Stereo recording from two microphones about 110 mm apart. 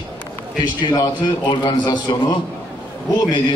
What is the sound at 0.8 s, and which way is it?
A man's voice, 40° left (ahead or behind).